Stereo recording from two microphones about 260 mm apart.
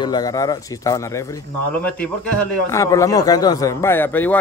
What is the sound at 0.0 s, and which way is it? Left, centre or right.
A man's voice, centre.